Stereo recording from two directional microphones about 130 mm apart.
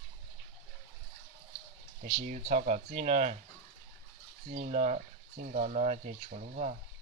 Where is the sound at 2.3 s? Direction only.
65° right (ahead or behind).